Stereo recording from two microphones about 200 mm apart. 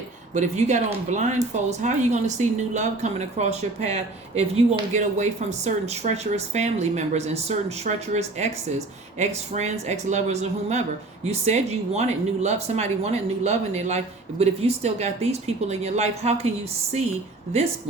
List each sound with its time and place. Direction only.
0.3 s a woman's voice: 35° right (ahead or behind)